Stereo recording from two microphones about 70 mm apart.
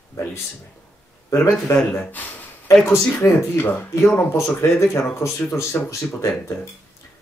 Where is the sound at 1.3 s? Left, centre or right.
Left.